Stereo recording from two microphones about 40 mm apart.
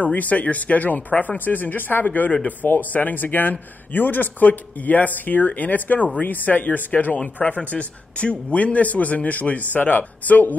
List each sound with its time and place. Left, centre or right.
0.0 s a man's voice: left